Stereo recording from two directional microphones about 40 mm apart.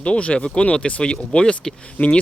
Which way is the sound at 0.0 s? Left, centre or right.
Left.